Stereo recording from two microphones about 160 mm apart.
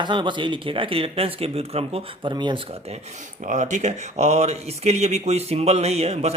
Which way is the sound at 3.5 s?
50° right (ahead or behind).